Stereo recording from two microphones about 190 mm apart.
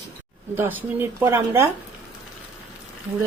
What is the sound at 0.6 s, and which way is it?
A woman's voice, 10° right (ahead or behind).